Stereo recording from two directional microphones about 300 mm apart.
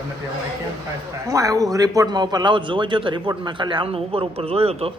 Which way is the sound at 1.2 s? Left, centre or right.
Centre.